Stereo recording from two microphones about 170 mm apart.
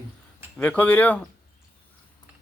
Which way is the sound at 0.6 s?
10° left (ahead or behind).